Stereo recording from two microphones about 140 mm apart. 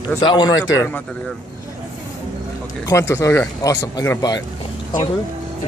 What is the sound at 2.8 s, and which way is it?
Speech, 20° left (ahead or behind).